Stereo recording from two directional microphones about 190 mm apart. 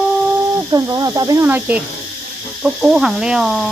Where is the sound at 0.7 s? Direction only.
20° right (ahead or behind).